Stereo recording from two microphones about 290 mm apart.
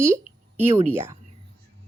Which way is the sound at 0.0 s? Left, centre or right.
Centre.